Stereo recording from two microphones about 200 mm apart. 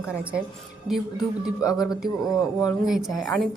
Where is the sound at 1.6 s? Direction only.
15° left (ahead or behind).